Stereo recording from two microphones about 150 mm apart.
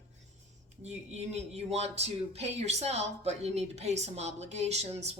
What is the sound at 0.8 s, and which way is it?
Speech, 45° right (ahead or behind).